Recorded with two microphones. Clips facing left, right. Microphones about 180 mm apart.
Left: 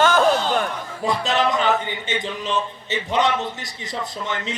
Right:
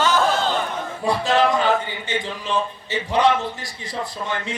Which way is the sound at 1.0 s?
20° left (ahead or behind).